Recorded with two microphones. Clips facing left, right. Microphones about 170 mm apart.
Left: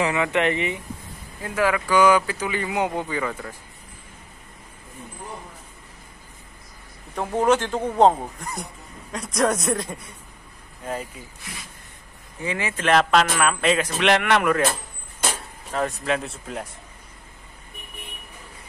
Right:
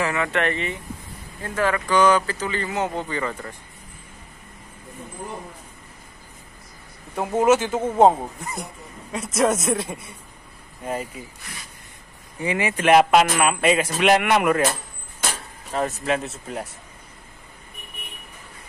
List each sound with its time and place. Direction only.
0.0 s speech: 15° left (ahead or behind)
7.2 s a man's voice: 5° right (ahead or behind)
12.4 s speech: 15° right (ahead or behind)
15.7 s a man's voice: 5° right (ahead or behind)